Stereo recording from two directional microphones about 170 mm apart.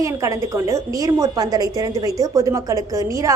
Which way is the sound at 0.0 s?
20° right (ahead or behind).